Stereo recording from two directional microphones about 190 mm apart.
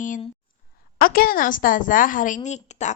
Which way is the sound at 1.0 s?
50° left (ahead or behind).